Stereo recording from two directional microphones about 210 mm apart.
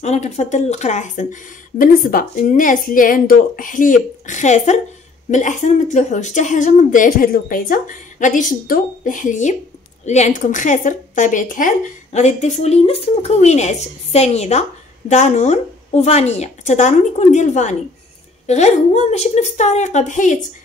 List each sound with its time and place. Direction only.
0.0 s a woman's voice: 30° left (ahead or behind)